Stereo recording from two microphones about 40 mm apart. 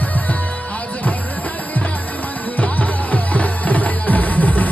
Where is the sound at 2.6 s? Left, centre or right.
Left.